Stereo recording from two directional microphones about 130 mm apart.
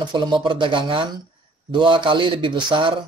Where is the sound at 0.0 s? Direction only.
35° right (ahead or behind).